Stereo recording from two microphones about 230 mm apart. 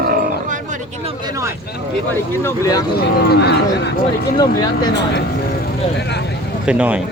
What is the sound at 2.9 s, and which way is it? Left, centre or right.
Speech, left.